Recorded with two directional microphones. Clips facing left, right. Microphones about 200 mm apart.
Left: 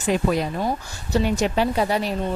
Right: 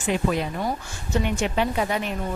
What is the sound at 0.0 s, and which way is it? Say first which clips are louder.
A woman's voice: left 3 dB; 40° left (ahead or behind).